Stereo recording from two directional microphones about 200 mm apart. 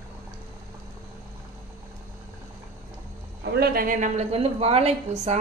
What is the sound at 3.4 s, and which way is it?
A woman's voice, 55° right (ahead or behind).